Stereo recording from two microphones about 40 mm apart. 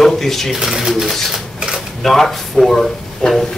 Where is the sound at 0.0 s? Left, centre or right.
Centre.